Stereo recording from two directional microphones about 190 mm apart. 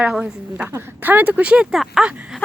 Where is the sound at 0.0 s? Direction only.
5° right (ahead or behind).